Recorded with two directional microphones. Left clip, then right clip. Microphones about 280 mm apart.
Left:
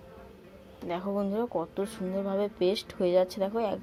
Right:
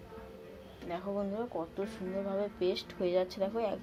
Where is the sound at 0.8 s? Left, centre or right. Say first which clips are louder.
Left 5 dB; left.